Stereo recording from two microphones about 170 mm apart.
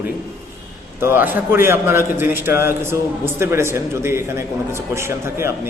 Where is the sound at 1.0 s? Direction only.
10° right (ahead or behind).